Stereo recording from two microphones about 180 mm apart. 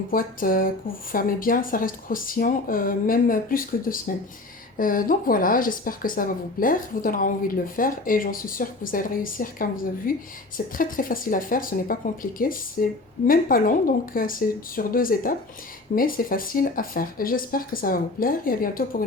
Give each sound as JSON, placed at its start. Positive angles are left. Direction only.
{"t": 0.1, "sound": "speech", "side_deg": 50}